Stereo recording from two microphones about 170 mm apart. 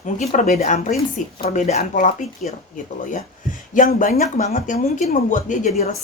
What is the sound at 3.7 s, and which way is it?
A woman's voice, 50° left (ahead or behind).